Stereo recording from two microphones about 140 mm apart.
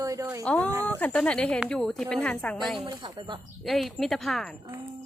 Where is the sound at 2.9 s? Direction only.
30° right (ahead or behind).